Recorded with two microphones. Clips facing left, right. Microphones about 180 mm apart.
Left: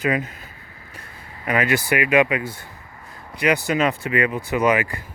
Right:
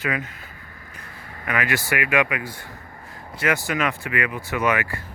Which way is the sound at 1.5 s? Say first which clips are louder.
Left 4 dB; 25° left (ahead or behind).